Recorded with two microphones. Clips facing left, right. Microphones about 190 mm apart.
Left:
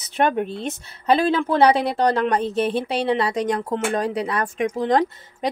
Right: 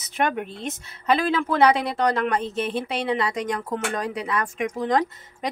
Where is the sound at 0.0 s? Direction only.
30° left (ahead or behind).